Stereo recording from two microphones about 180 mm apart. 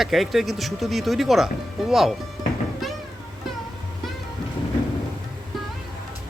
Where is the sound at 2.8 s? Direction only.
Centre (ahead or behind).